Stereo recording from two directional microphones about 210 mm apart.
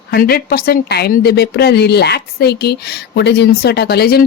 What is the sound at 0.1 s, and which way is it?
A woman's voice, 45° left (ahead or behind).